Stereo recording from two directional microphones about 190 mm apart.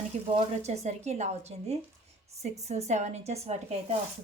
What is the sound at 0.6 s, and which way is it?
A woman's voice, 35° right (ahead or behind).